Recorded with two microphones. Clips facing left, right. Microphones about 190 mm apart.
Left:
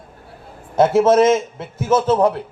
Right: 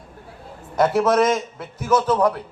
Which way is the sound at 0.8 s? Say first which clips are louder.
Left 4 dB; 25° left (ahead or behind).